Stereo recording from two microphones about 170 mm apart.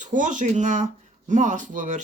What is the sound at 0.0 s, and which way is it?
Speech, 50° right (ahead or behind).